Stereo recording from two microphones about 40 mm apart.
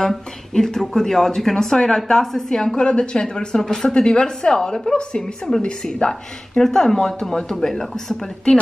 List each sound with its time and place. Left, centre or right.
0.5 s a woman's voice: centre
3.6 s speech: centre
3.9 s a woman's voice: left